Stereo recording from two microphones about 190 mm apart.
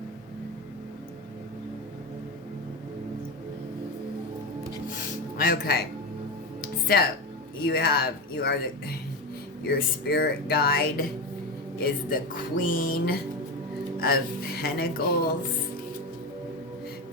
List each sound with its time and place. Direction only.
5.4 s speech: 50° left (ahead or behind)
6.6 s music: 50° left (ahead or behind)
7.6 s speech: 55° left (ahead or behind)
9.6 s speech: 55° left (ahead or behind)